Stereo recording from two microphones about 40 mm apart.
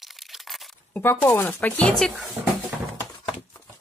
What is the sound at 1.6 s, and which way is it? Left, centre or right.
Speech, left.